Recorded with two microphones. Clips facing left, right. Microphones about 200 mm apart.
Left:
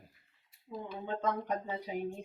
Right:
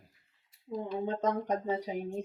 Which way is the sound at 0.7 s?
40° right (ahead or behind).